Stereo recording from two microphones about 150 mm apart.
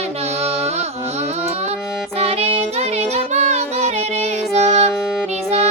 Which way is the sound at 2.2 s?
40° right (ahead or behind).